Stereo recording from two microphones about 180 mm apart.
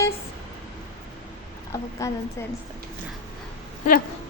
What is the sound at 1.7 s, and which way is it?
Speech, 15° left (ahead or behind).